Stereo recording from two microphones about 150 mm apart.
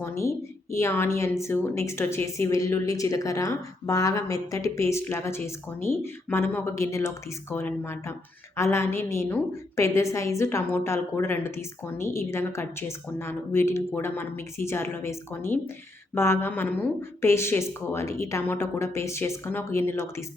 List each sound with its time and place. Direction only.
0.0 s a woman's voice: 20° left (ahead or behind)